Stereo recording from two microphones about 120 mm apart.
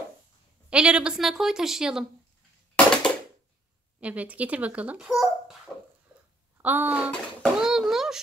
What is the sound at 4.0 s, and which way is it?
A child's voice, 10° right (ahead or behind).